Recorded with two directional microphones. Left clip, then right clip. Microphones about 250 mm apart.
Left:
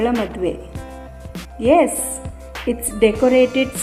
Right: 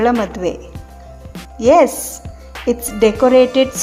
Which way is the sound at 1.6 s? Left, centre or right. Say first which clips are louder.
Right 4 dB; centre.